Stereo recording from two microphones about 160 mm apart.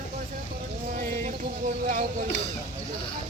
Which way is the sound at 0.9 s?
55° right (ahead or behind).